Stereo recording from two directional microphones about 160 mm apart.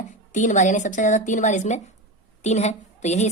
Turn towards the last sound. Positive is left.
turn(degrees=45)  # may be behind; listen again after turning